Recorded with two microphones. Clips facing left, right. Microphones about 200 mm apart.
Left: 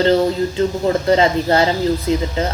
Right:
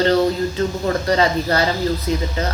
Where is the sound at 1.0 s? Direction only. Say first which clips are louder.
Left 3 dB; 25° left (ahead or behind).